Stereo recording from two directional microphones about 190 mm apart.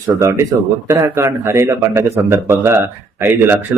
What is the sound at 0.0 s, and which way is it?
A man's voice, 20° right (ahead or behind).